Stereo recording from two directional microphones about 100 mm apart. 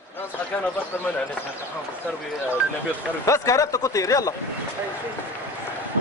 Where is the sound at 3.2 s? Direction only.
30° left (ahead or behind).